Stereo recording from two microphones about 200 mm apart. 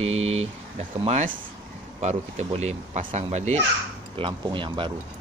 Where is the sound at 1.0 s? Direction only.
35° right (ahead or behind).